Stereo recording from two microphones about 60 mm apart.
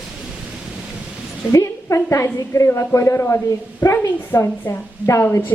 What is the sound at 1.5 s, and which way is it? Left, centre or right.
A woman's voice, left.